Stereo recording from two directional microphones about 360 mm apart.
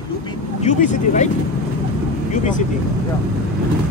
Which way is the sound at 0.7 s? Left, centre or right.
Centre.